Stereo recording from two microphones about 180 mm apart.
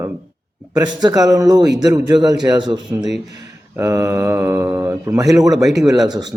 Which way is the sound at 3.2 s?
15° right (ahead or behind).